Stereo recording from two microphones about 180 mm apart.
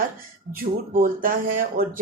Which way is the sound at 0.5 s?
50° right (ahead or behind).